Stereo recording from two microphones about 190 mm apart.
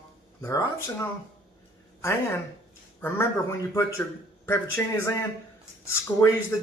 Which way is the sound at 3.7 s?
15° left (ahead or behind).